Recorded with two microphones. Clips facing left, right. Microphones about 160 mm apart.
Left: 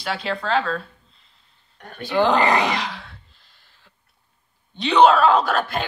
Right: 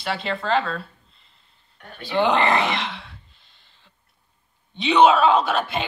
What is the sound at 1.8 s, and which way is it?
Speech, 45° left (ahead or behind).